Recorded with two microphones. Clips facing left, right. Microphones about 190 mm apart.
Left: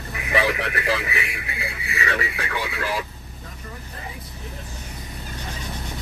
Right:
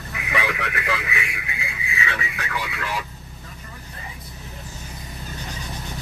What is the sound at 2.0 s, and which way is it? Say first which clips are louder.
Speech: left 4 dB; 40° left (ahead or behind).